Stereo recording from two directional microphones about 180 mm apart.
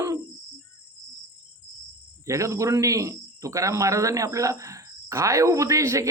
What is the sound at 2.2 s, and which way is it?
Speech, 15° right (ahead or behind).